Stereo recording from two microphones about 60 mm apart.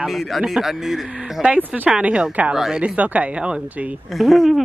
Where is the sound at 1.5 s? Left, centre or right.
Right.